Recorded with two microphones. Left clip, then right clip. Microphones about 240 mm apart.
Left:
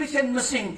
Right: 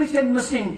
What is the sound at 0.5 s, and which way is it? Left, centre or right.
Speech, left.